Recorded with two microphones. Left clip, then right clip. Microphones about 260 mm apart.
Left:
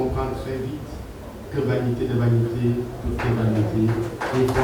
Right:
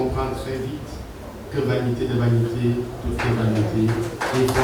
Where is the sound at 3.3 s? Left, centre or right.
Centre.